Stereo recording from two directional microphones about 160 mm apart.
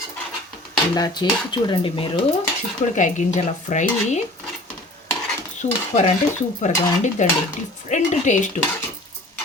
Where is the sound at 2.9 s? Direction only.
50° left (ahead or behind).